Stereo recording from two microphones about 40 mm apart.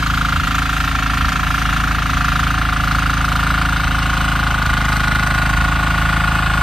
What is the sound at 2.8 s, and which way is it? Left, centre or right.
Vehicle, centre.